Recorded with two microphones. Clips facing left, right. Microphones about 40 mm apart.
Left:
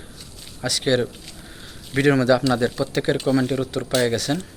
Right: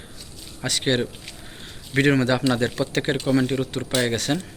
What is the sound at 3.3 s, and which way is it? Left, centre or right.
Speech, right.